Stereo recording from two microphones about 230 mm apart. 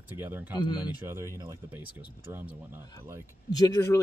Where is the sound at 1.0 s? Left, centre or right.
Centre.